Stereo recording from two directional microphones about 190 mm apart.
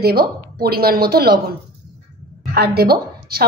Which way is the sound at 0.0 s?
55° right (ahead or behind).